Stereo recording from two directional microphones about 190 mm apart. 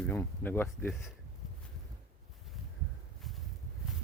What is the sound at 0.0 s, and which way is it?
Speech, 10° left (ahead or behind).